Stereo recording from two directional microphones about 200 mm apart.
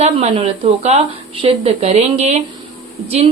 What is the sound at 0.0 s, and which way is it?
A woman's voice, 30° right (ahead or behind).